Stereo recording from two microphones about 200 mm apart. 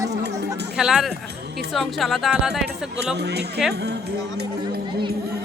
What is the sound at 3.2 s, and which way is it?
Speech, 55° right (ahead or behind).